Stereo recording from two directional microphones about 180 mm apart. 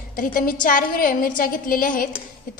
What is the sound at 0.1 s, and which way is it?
A woman's voice, 50° left (ahead or behind).